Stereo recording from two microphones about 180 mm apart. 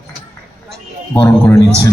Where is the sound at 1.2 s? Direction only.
20° left (ahead or behind).